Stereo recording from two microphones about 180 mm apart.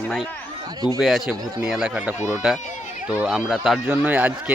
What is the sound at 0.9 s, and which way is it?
Speech, centre (ahead or behind).